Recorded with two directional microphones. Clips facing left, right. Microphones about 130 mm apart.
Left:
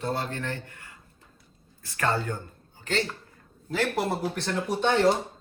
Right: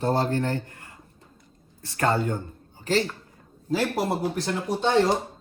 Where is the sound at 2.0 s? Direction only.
20° right (ahead or behind).